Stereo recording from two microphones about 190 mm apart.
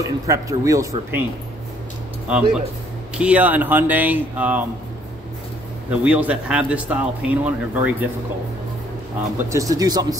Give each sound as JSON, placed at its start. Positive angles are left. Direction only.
{"t": 0.3, "sound": "speech", "side_deg": -15}
{"t": 2.2, "sound": "speech", "side_deg": -5}
{"t": 5.9, "sound": "speech", "side_deg": -5}
{"t": 9.4, "sound": "speech", "side_deg": -15}